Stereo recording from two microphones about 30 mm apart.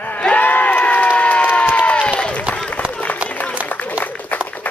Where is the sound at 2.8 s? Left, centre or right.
Left.